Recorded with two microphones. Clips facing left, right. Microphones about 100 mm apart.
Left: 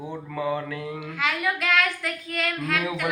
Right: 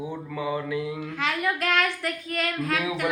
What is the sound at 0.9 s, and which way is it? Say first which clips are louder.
Child singing: even; 40° right (ahead or behind).